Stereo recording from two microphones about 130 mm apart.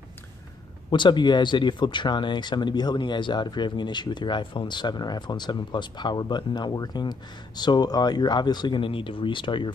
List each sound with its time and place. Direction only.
0.8 s speech: 35° left (ahead or behind)